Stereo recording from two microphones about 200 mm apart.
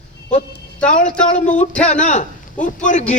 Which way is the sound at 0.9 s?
40° left (ahead or behind).